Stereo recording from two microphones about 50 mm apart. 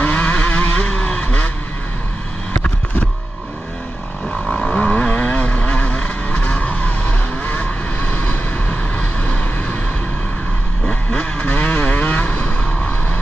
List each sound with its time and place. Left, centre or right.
0.0 s vehicle: left
4.5 s vehicle: left
10.9 s vehicle: left
11.4 s vehicle: left